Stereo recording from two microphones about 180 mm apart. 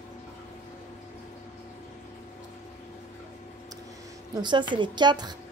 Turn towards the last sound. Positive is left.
turn(degrees=-25)  # may be behind; listen again after turning